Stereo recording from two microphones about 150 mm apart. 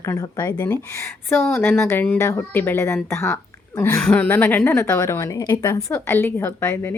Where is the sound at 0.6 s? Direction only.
15° left (ahead or behind).